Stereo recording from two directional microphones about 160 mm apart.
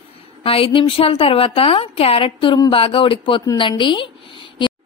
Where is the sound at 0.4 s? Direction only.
35° left (ahead or behind).